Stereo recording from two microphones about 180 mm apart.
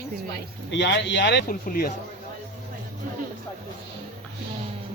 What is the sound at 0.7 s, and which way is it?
Speech, 80° left.